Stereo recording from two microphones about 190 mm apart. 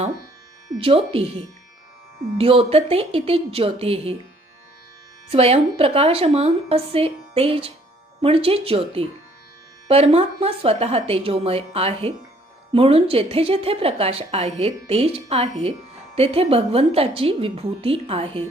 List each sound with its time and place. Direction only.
0.8 s speech: 30° right (ahead or behind)
2.4 s a woman's voice: 30° right (ahead or behind)
5.3 s a woman's voice: 30° right (ahead or behind)